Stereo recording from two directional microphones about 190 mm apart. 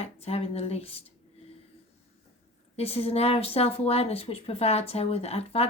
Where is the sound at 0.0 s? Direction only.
35° left (ahead or behind).